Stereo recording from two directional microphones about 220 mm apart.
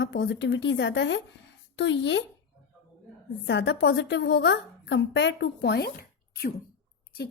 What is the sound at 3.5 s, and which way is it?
Speech, 55° left (ahead or behind).